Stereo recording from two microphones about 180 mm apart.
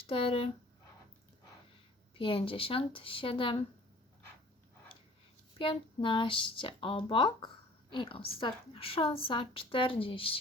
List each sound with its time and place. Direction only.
0.1 s speech: 30° left (ahead or behind)
2.1 s speech: 30° left (ahead or behind)
5.5 s speech: 30° left (ahead or behind)